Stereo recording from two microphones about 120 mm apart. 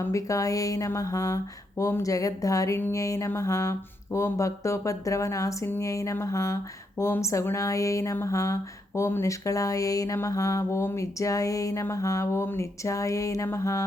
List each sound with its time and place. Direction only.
0.0 s mantra: 25° left (ahead or behind)